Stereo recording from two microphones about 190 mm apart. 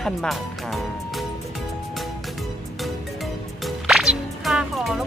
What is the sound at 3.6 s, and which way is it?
Music, centre (ahead or behind).